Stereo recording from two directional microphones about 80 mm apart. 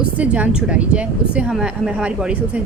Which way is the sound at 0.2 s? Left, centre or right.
Centre.